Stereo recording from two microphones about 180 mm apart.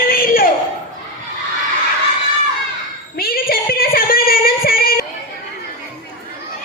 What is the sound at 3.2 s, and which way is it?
Female singing, 55° left (ahead or behind).